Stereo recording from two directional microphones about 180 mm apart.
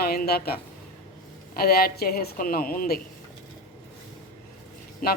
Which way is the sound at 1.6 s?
55° left (ahead or behind).